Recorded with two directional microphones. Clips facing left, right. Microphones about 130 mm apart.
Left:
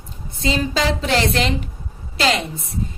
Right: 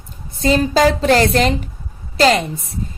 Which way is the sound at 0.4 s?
45° right (ahead or behind).